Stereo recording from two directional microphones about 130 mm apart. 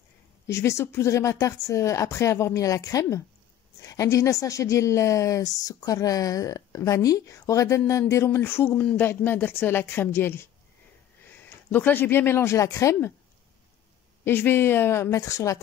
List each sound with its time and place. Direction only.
0.5 s a woman's voice: 20° left (ahead or behind)
14.2 s a woman's voice: 15° left (ahead or behind)